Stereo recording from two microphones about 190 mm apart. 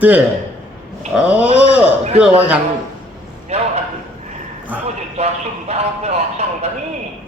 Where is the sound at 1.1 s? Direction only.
5° right (ahead or behind).